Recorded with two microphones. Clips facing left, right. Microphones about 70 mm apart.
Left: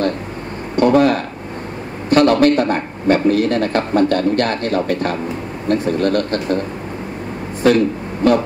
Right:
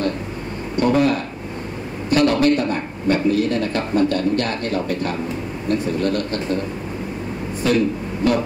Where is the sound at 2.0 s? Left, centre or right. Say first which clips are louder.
Left 4 dB; left.